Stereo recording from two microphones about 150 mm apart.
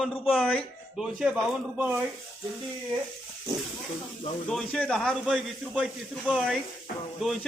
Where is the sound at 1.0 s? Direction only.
5° right (ahead or behind).